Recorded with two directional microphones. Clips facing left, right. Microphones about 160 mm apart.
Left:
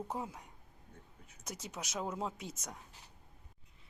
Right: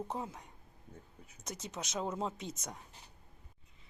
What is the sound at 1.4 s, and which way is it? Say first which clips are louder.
Speech: right 2 dB; 10° left (ahead or behind).